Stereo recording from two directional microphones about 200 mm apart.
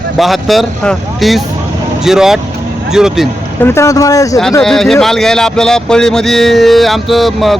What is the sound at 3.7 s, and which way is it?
Speech, 15° left (ahead or behind).